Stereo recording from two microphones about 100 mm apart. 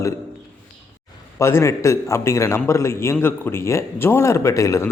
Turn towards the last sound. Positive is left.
turn(degrees=30)  # may be behind; listen again after turning